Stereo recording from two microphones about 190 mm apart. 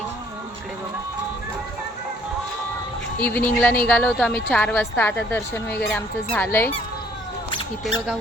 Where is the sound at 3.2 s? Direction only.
10° left (ahead or behind).